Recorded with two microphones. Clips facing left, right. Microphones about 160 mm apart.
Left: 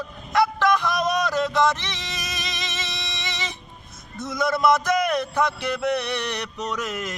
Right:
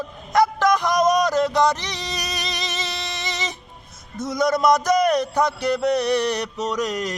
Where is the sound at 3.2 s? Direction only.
45° right (ahead or behind).